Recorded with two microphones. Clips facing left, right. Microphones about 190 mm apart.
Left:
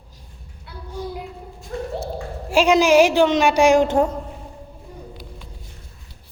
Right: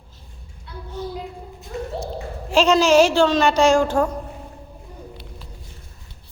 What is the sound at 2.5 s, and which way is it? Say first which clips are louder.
A woman's voice: left 1 dB; 10° left (ahead or behind).